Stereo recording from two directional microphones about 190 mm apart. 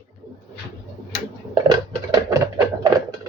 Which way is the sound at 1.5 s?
20° right (ahead or behind).